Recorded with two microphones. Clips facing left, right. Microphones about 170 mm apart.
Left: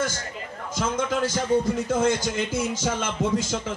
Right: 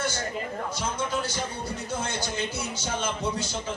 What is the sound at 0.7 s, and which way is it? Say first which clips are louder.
Speech: left 7 dB; 90° left.